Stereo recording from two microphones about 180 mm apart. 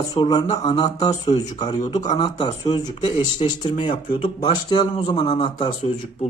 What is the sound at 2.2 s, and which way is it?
Speech, 25° left (ahead or behind).